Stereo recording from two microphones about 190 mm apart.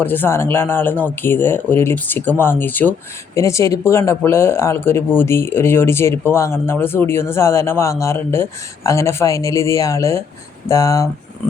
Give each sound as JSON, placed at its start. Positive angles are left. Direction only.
{"t": 0.0, "sound": "speech", "side_deg": 10}